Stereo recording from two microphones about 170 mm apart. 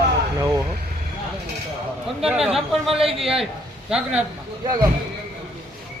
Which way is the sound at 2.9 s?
35° right (ahead or behind).